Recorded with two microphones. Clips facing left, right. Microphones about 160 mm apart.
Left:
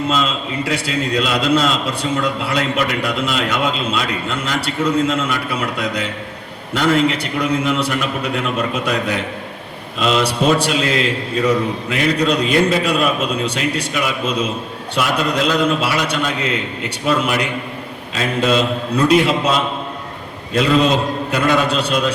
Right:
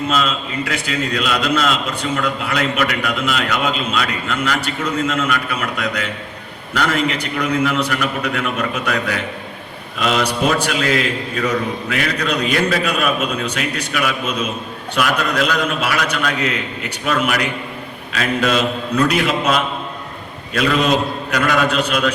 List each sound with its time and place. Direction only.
0.2 s a man's voice: 30° left (ahead or behind)
21.2 s a man's voice: 30° left (ahead or behind)